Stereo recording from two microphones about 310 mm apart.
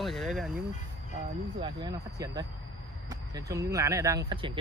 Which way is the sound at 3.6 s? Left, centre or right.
Centre.